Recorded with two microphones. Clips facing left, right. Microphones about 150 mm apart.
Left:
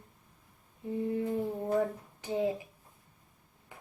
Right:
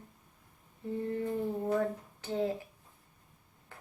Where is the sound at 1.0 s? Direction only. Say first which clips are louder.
Left 1 dB; 10° left (ahead or behind).